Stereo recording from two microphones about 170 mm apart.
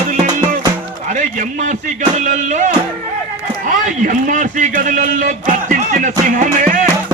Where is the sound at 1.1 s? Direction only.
50° right (ahead or behind).